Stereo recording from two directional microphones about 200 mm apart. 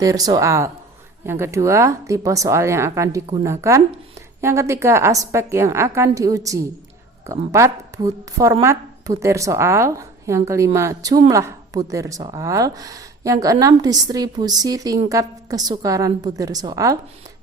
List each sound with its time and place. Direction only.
0.0 s a woman's voice: 20° right (ahead or behind)